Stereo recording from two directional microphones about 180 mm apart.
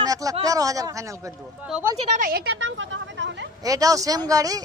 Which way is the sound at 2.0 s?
45° right (ahead or behind).